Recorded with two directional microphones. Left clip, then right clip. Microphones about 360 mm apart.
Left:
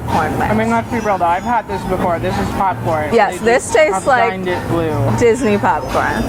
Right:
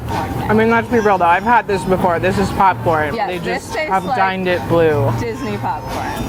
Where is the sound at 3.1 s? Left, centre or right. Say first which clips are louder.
Left 8 dB; left.